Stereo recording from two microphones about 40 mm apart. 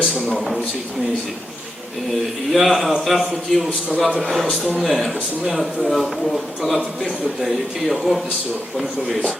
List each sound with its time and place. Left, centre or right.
0.0 s speech: right
0.3 s a man's voice: centre
2.5 s a man's voice: centre